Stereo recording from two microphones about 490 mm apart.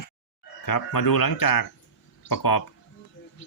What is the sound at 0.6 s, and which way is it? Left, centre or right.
Speech, left.